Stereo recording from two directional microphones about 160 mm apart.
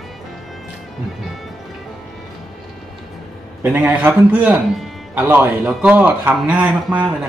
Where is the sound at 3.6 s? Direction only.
10° right (ahead or behind).